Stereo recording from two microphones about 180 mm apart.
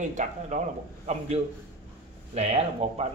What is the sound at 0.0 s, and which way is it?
Speech, 45° right (ahead or behind).